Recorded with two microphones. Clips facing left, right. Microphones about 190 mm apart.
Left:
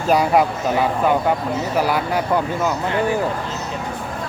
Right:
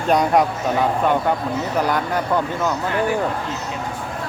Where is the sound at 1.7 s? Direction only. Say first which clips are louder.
Left 1 dB; 5° left (ahead or behind).